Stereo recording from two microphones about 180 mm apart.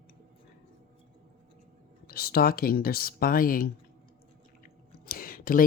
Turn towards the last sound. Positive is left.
turn(degrees=50)  # may be behind; listen again after turning